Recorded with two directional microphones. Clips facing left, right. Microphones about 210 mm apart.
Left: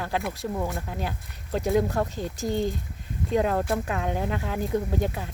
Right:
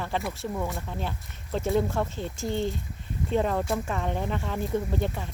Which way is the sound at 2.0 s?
40° left (ahead or behind).